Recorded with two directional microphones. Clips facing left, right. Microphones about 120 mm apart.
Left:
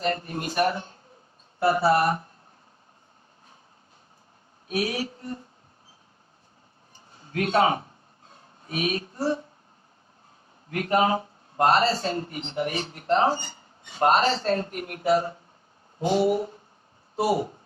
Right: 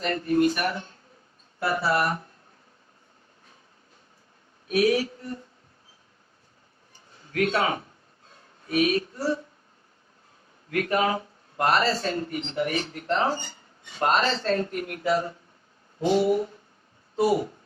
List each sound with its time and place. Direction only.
0.0 s speech: 30° left (ahead or behind)
4.7 s speech: 30° left (ahead or behind)
7.3 s speech: 30° left (ahead or behind)
10.7 s speech: 25° left (ahead or behind)